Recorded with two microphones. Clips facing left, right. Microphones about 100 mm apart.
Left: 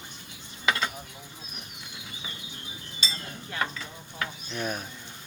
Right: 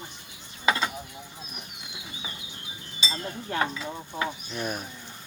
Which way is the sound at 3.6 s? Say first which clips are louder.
Right 4 dB; 15° right (ahead or behind).